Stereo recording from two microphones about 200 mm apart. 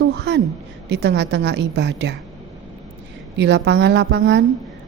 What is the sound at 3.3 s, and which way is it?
A woman's voice, 60° right (ahead or behind).